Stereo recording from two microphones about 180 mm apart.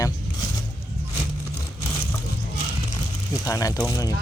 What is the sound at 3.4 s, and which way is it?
Speech, 20° left (ahead or behind).